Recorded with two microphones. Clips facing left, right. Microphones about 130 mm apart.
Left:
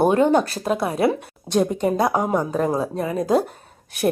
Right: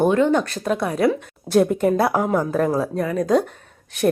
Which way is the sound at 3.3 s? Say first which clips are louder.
Right 1 dB; 35° left (ahead or behind).